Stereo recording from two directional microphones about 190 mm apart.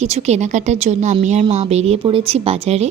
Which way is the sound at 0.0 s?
35° right (ahead or behind).